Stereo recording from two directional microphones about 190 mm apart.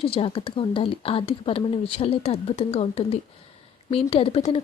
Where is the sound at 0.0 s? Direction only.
30° left (ahead or behind).